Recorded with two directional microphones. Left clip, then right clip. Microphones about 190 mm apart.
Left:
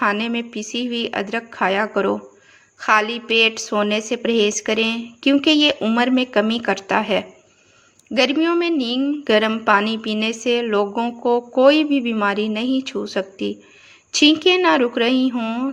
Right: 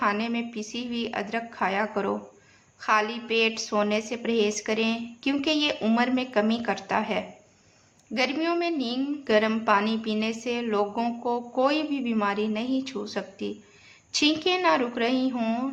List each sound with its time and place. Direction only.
0.0 s a woman's voice: 30° left (ahead or behind)